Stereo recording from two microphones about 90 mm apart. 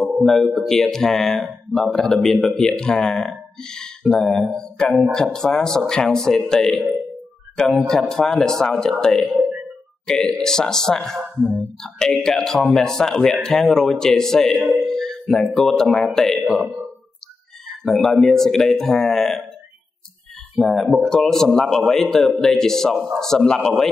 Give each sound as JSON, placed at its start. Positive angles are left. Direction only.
{"t": 0.2, "sound": "a man's voice", "side_deg": 5}
{"t": 9.4, "sound": "music", "side_deg": -15}
{"t": 10.0, "sound": "speech", "side_deg": 5}
{"t": 17.8, "sound": "a man's voice", "side_deg": 5}
{"t": 20.5, "sound": "a man's voice", "side_deg": 5}